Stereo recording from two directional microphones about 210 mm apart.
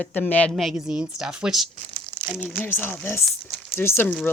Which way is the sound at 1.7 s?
35° right (ahead or behind).